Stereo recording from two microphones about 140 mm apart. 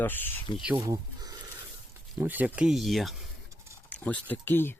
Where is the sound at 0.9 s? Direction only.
25° right (ahead or behind).